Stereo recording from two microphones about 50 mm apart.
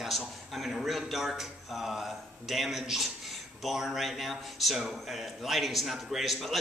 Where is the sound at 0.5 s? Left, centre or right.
Centre.